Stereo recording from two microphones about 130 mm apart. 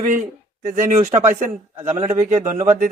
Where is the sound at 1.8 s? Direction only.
55° right (ahead or behind).